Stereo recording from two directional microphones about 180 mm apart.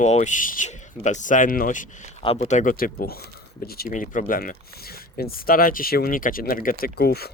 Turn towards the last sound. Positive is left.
turn(degrees=60)  # may be behind; listen again after turning